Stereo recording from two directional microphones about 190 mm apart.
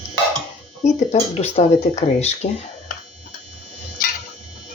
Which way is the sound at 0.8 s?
35° left (ahead or behind).